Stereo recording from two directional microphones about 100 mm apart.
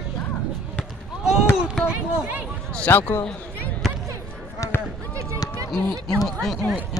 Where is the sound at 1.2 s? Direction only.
5° right (ahead or behind).